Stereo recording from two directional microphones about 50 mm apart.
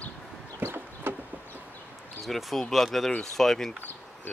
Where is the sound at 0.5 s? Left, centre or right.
Right.